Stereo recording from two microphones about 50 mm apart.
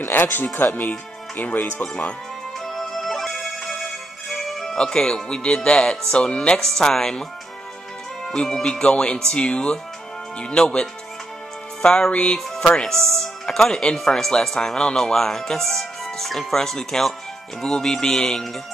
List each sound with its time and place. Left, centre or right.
0.0 s speech: left
2.6 s music: centre
6.1 s speech: centre
6.6 s speech: centre
8.3 s speech: centre
11.8 s music: centre
12.1 s speech: centre